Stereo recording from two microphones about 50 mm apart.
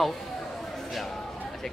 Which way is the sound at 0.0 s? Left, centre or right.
Centre.